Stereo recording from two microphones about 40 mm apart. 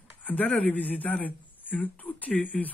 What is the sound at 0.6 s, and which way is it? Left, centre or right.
Speech, left.